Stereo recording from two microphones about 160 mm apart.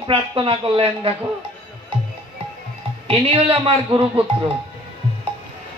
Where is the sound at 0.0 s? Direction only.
30° right (ahead or behind).